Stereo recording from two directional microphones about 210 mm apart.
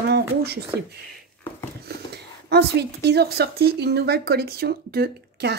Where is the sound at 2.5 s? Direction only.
50° right (ahead or behind).